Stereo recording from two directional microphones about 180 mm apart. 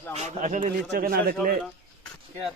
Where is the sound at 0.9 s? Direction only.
55° right (ahead or behind).